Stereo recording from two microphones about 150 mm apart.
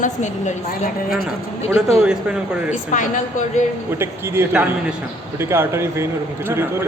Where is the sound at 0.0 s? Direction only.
55° left (ahead or behind).